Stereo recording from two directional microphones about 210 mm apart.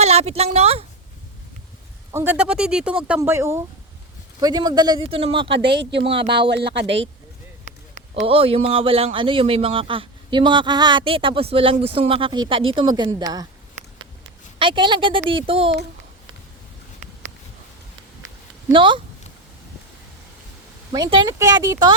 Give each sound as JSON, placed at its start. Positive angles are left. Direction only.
{"t": 0.0, "sound": "a woman's voice", "side_deg": -30}
{"t": 2.1, "sound": "speech", "side_deg": -10}
{"t": 5.6, "sound": "speech", "side_deg": -55}
{"t": 6.0, "sound": "speech", "side_deg": -25}
{"t": 6.5, "sound": "speech", "side_deg": -55}
{"t": 8.1, "sound": "speech", "side_deg": -30}
{"t": 14.6, "sound": "speech", "side_deg": -25}
{"t": 18.7, "sound": "speech", "side_deg": -25}
{"t": 20.9, "sound": "speech", "side_deg": -20}